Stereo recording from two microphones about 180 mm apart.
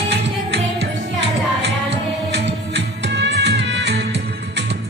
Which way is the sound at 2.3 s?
75° right (ahead or behind).